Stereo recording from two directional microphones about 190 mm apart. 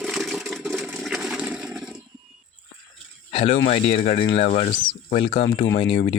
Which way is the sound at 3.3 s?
30° left (ahead or behind).